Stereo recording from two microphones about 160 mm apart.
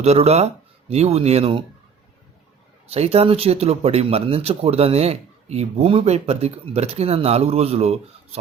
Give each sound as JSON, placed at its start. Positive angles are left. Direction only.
{"t": 0.0, "sound": "speech", "side_deg": -40}
{"t": 2.9, "sound": "speech", "side_deg": -40}